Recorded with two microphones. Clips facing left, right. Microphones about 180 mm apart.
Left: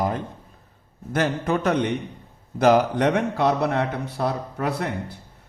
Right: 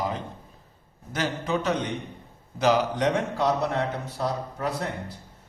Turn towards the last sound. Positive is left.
turn(degrees=60)  # may be behind; listen again after turning